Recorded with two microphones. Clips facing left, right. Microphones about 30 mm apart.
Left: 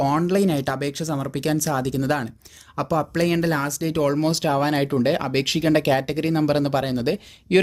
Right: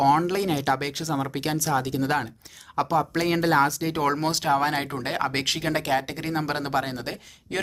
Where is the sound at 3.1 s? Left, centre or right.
Centre.